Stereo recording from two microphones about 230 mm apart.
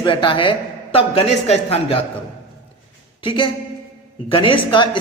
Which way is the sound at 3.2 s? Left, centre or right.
Left.